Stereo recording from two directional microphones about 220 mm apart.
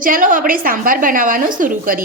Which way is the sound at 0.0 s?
40° right (ahead or behind).